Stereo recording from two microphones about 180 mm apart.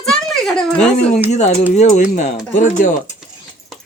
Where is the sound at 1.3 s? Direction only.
40° left (ahead or behind).